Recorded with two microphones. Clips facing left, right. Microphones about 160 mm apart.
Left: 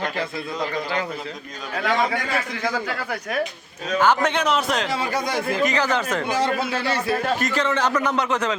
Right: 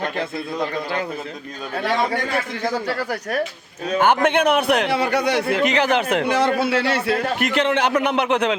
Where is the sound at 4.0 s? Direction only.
55° right (ahead or behind).